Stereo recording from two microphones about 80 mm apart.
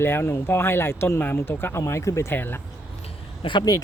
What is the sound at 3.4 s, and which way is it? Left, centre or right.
Speech, left.